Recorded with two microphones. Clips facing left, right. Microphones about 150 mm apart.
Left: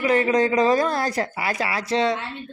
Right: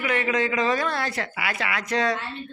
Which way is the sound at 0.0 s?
35° left (ahead or behind).